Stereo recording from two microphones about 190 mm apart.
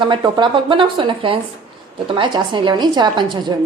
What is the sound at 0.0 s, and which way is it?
A woman's voice, 25° right (ahead or behind).